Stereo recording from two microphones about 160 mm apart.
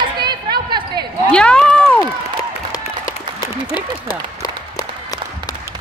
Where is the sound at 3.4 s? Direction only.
25° left (ahead or behind).